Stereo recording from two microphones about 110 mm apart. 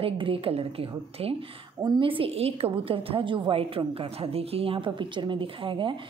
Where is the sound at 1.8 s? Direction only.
45° right (ahead or behind).